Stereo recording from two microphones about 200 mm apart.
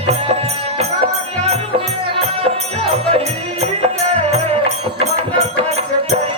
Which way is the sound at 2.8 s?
30° right (ahead or behind).